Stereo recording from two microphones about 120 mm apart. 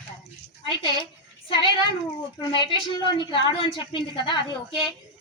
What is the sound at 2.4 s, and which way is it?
A woman's voice, 40° left (ahead or behind).